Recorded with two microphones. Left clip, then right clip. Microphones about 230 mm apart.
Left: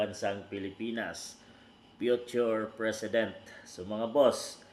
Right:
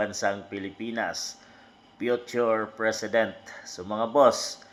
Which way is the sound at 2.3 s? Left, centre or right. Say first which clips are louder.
Right 5 dB; centre.